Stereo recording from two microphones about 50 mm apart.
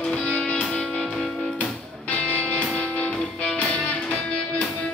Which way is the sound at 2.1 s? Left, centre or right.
Left.